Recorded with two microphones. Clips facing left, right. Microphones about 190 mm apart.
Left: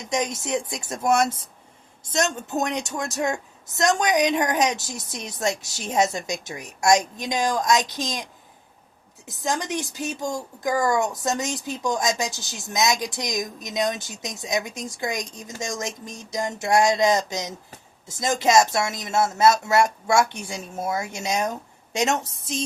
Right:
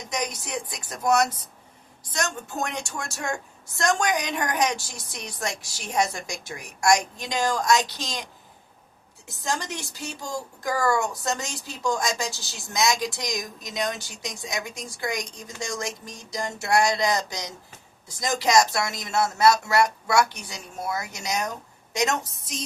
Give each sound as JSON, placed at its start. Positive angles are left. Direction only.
{"t": 0.1, "sound": "a woman's voice", "side_deg": 25}
{"t": 9.2, "sound": "a woman's voice", "side_deg": 20}